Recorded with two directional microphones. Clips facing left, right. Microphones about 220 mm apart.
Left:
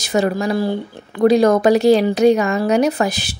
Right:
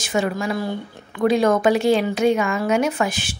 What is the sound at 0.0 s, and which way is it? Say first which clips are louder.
Speech: left 4 dB; 40° left (ahead or behind).